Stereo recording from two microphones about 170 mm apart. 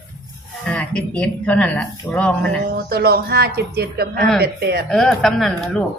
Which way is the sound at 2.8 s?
70° right (ahead or behind).